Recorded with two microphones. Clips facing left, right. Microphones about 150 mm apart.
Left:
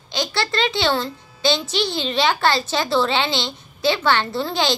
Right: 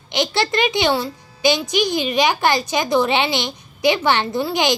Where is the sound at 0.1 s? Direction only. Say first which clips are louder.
Right 4 dB; 20° right (ahead or behind).